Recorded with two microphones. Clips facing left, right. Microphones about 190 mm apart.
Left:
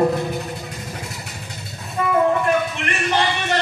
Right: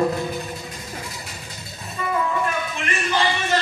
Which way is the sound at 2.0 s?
50° left (ahead or behind).